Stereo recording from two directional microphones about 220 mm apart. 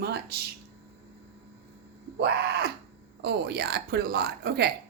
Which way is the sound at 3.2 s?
50° right (ahead or behind).